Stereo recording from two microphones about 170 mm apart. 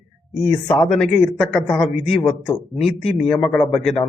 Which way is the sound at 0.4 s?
10° left (ahead or behind).